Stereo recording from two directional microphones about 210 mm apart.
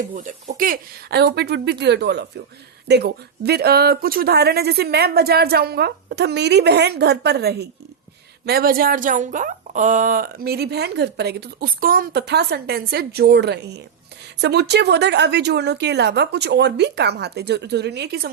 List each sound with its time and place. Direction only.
0.2 s speech: 35° right (ahead or behind)
1.2 s speech: 55° right (ahead or behind)